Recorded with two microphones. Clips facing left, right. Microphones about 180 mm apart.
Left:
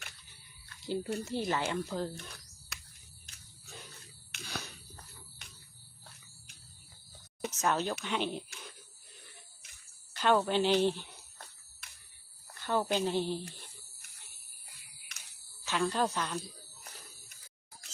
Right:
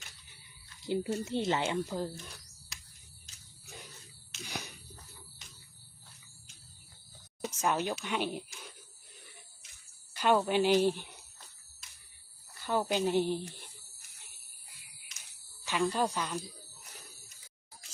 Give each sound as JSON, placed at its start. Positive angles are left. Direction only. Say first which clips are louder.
{"t": 0.8, "sound": "speech", "louder": "right 2 dB", "side_deg": -20}
{"t": 2.1, "sound": "speech", "louder": "even", "side_deg": 60}
{"t": 2.7, "sound": "cricket", "louder": "left 4 dB", "side_deg": 60}
{"t": 3.3, "sound": "a sound", "louder": "left 3 dB", "side_deg": 60}
{"t": 4.4, "sound": "a sound", "louder": "even", "side_deg": -15}
{"t": 5.4, "sound": "cricket", "louder": "left 1 dB", "side_deg": 60}
{"t": 7.5, "sound": "speech", "louder": "even", "side_deg": -10}
{"t": 10.2, "sound": "speech", "louder": "right 1 dB", "side_deg": -10}
{"t": 11.8, "sound": "a sound", "louder": "left 2 dB", "side_deg": 60}
{"t": 12.5, "sound": "speech", "louder": "even", "side_deg": -10}
{"t": 15.1, "sound": "insect", "louder": "left 2 dB", "side_deg": 60}
{"t": 15.6, "sound": "speech", "louder": "right 1 dB", "side_deg": -15}